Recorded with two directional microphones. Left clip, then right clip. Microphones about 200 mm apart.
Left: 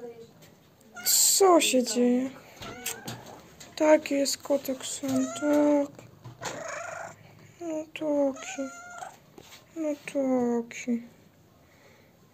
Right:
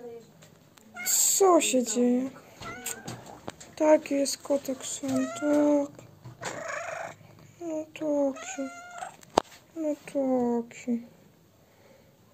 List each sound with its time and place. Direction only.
0.9 s owl: centre (ahead or behind)
2.0 s cat: centre (ahead or behind)
3.7 s a child's voice: centre (ahead or behind)